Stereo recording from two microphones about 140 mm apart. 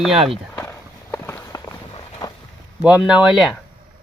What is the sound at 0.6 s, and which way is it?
Walk, 20° left (ahead or behind).